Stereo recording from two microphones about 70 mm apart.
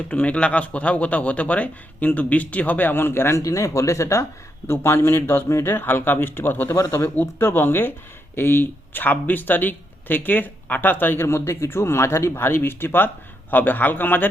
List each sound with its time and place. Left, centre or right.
0.1 s a man's voice: left
3.4 s speech: left
6.7 s speech: left
7.2 s a man's voice: left